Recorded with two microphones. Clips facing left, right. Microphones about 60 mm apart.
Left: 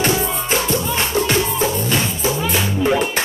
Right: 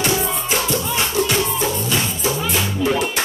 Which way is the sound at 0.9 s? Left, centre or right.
Left.